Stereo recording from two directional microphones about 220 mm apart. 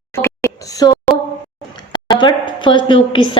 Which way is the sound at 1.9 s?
20° left (ahead or behind).